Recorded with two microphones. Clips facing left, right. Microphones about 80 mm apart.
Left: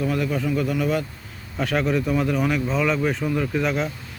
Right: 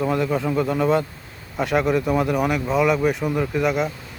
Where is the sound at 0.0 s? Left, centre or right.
Right.